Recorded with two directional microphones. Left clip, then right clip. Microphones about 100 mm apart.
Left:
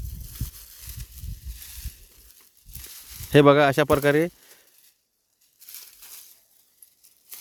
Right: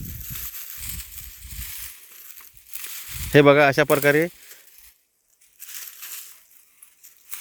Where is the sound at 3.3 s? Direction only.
25° left (ahead or behind).